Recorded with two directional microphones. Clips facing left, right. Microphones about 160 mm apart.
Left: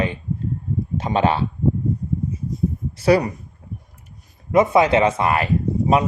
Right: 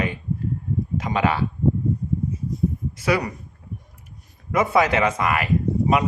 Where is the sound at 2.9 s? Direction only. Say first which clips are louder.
Left 8 dB; 30° left (ahead or behind).